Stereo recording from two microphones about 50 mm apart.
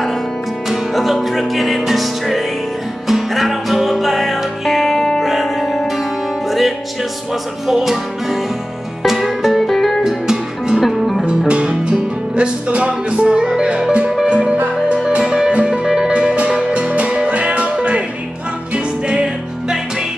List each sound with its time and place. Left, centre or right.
0.7 s music: centre
5.2 s music: centre
7.6 s music: centre
10.0 s music: centre
11.2 s music: right